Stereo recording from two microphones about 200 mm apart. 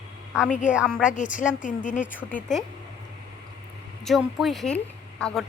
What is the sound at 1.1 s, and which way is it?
Speech, 40° left (ahead or behind).